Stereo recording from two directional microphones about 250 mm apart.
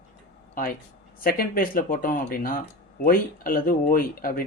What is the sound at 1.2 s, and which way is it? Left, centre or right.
Speech, left.